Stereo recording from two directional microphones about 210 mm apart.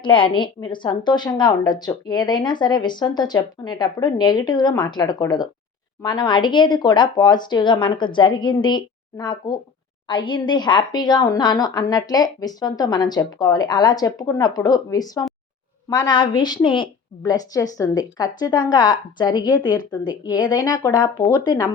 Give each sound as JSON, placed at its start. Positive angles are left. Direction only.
{"t": 0.0, "sound": "a woman's voice", "side_deg": 25}